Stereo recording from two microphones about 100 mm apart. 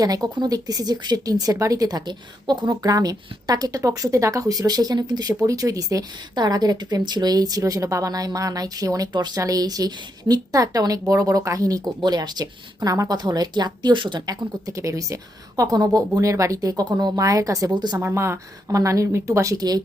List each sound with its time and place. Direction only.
0.0 s a woman's voice: 40° right (ahead or behind)
18.0 s a woman's voice: 25° right (ahead or behind)